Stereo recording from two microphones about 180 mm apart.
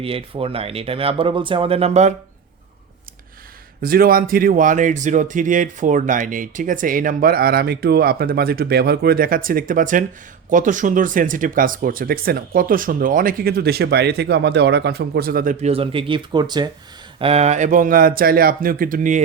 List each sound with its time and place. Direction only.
0.0 s speech: 30° right (ahead or behind)
3.8 s speech: 55° right (ahead or behind)
15.6 s speech: 30° right (ahead or behind); by 19.2 s 45° right (ahead or behind)